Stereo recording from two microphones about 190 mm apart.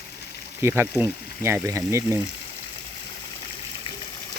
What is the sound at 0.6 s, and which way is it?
Speech, 15° right (ahead or behind).